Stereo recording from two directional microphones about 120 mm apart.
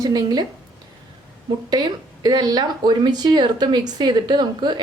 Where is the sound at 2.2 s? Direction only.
35° right (ahead or behind).